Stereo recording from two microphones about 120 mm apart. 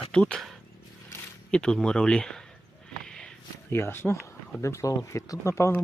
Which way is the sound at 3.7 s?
20° left (ahead or behind).